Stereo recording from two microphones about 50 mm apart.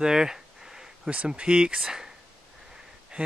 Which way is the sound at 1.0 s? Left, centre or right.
Right.